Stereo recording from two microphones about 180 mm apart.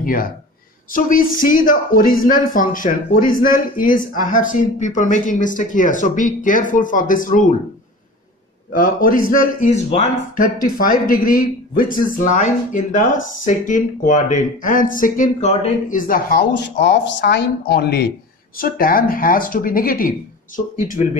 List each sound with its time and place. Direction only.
0.0 s speech: 50° left (ahead or behind)
8.7 s speech: 50° left (ahead or behind)
16.6 s speech: 75° left (ahead or behind)
18.6 s speech: 55° left (ahead or behind)